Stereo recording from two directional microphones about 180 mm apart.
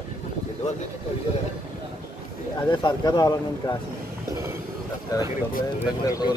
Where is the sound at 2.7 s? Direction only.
25° left (ahead or behind).